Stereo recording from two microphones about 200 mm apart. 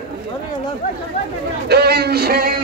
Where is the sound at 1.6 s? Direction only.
55° right (ahead or behind).